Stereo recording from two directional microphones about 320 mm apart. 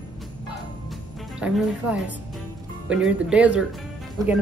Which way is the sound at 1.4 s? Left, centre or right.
Centre.